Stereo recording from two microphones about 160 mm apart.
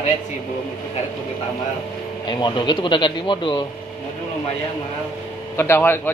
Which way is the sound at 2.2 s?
30° left (ahead or behind).